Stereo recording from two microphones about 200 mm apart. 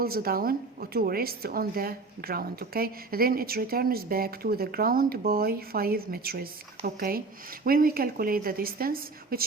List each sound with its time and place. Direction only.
0.0 s a woman's voice: 50° right (ahead or behind)